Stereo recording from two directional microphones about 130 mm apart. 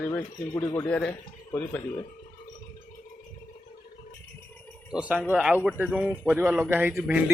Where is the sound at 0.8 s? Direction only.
10° left (ahead or behind).